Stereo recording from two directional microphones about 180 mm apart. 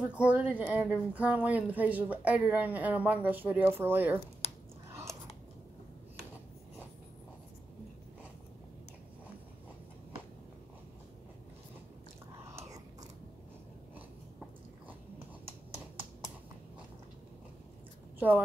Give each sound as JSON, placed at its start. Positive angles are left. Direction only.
{"t": 0.0, "sound": "a woman's voice", "side_deg": -5}
{"t": 4.4, "sound": "a sound", "side_deg": 35}
{"t": 12.5, "sound": "biting", "side_deg": -20}